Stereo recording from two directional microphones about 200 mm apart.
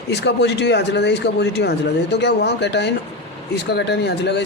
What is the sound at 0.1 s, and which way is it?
Speech, 55° left (ahead or behind).